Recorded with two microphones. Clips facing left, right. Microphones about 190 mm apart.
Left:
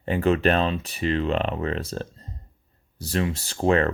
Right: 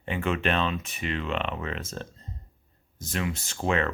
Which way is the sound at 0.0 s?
40° left (ahead or behind).